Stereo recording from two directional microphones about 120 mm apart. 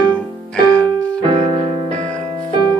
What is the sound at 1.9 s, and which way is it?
Music, 10° left (ahead or behind).